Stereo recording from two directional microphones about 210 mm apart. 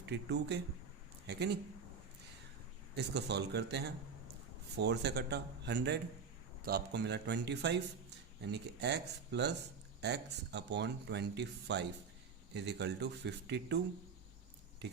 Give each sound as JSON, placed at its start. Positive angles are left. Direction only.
{"t": 0.0, "sound": "speech", "side_deg": -55}
{"t": 2.9, "sound": "speech", "side_deg": -50}
{"t": 14.8, "sound": "speech", "side_deg": -50}